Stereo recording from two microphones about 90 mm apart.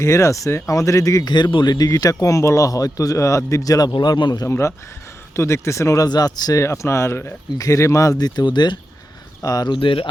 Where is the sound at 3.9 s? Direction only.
55° left (ahead or behind).